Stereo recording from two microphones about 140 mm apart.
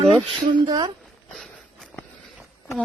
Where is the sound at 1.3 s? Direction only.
5° left (ahead or behind).